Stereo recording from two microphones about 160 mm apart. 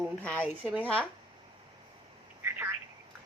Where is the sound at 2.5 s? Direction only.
15° right (ahead or behind).